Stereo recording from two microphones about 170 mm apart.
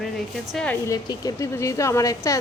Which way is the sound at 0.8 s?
20° left (ahead or behind).